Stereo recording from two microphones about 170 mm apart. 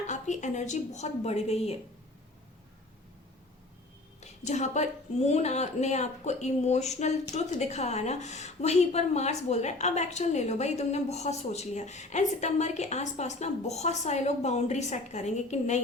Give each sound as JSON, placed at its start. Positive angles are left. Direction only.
{"t": 0.1, "sound": "a woman's voice", "side_deg": 45}
{"t": 4.2, "sound": "a woman's voice", "side_deg": 45}